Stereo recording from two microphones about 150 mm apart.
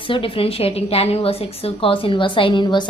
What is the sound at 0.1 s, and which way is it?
A woman's voice, 35° left (ahead or behind).